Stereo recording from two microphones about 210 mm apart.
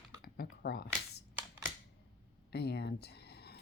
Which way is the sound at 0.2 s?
50° left (ahead or behind).